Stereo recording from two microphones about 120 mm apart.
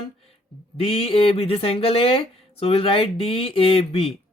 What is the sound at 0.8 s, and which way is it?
Speech, 55° left (ahead or behind).